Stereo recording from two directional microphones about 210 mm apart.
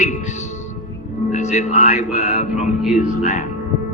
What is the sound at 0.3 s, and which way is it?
Music, 35° left (ahead or behind).